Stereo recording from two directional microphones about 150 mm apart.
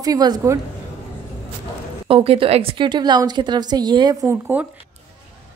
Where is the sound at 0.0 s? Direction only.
25° right (ahead or behind).